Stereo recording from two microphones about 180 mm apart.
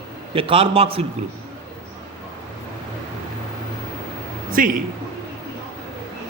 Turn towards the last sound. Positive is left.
turn(degrees=-50)  # may be behind; listen again after turning